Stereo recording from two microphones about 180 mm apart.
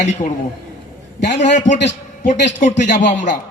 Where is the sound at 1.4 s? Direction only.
40° left (ahead or behind).